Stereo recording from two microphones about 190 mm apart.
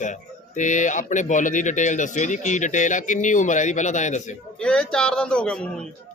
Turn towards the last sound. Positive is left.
turn(degrees=5)  # may be behind; listen again after turning